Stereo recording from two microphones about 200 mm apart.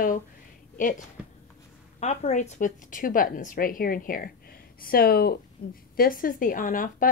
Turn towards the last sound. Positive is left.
turn(degrees=45)  # may be behind; listen again after turning